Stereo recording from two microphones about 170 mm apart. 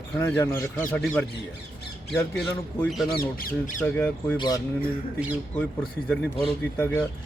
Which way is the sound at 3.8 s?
10° left (ahead or behind).